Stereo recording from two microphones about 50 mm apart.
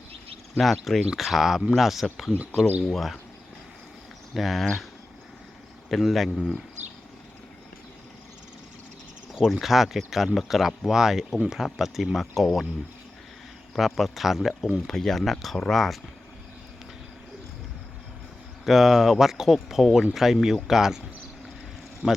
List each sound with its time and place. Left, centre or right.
0.5 s speech: centre
4.4 s speech: centre
5.9 s speech: centre
6.3 s speech: centre
9.3 s speech: centre
13.7 s speech: centre
14.8 s speech: centre
18.6 s speech: centre
22.0 s speech: right